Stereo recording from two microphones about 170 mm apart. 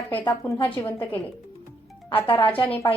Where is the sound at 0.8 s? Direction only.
10° left (ahead or behind).